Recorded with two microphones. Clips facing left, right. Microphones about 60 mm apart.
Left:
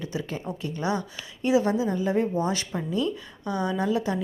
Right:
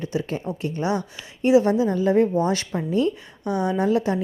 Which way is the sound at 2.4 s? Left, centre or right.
Right.